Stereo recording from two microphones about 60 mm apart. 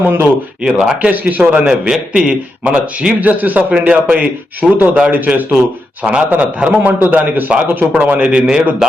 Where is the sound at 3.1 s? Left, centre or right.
Right.